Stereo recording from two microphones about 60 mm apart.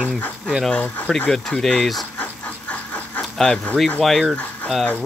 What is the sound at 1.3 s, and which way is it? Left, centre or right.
Speech, centre.